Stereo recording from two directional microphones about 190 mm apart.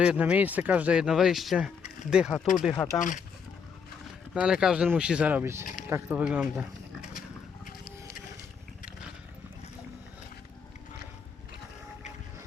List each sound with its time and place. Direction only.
0.0 s speech: 5° right (ahead or behind)
2.7 s speech: 15° left (ahead or behind)
3.0 s speech: 40° left (ahead or behind)
4.4 s speech: 5° right (ahead or behind)
7.0 s a sound: 45° left (ahead or behind)